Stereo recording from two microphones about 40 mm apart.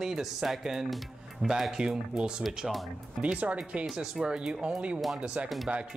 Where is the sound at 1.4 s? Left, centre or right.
Right.